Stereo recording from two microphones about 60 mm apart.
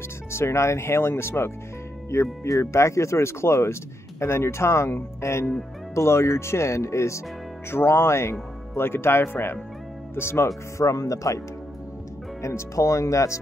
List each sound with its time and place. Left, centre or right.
0.3 s speech: left